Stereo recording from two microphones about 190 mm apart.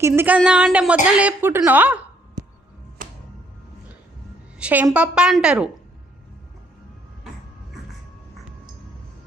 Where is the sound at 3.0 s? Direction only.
45° right (ahead or behind).